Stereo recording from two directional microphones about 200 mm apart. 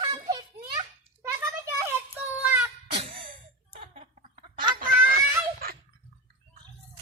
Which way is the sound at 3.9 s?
30° right (ahead or behind).